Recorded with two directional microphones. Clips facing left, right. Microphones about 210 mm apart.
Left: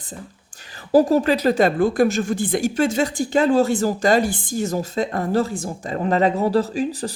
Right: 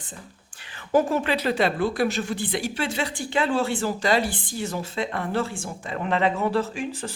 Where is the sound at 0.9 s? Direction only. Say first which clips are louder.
Left 6 dB; 40° left (ahead or behind).